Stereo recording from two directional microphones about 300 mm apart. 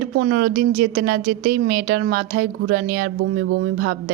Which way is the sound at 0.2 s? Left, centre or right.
Right.